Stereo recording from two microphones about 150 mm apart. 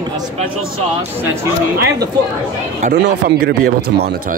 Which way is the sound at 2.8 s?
90° right.